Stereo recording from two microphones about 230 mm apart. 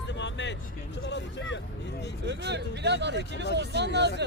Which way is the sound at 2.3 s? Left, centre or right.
Right.